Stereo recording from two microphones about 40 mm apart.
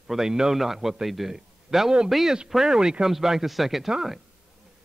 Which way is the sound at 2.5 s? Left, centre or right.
Centre.